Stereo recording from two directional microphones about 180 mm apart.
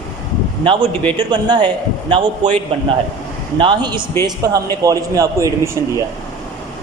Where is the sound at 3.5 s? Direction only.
25° right (ahead or behind).